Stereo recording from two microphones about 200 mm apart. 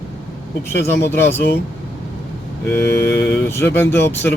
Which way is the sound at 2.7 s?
10° left (ahead or behind).